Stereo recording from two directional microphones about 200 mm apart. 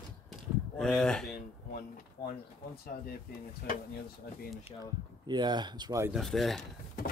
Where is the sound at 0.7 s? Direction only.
5° left (ahead or behind).